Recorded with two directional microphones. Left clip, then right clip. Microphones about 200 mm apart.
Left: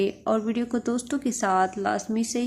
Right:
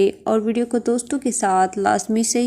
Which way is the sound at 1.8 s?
30° right (ahead or behind).